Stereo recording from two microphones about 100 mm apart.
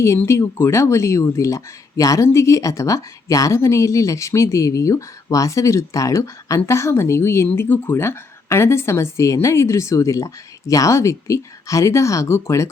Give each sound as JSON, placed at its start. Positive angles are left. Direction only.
{"t": 0.3, "sound": "speech", "side_deg": 25}